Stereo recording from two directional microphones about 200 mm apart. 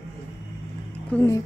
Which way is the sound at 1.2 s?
15° left (ahead or behind).